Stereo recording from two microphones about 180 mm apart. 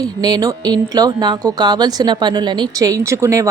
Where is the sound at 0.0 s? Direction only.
20° right (ahead or behind).